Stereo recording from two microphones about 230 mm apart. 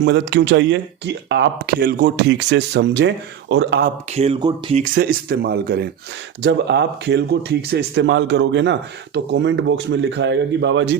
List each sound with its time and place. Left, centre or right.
0.0 s speech: right
4.1 s speech: right
4.8 s speech: right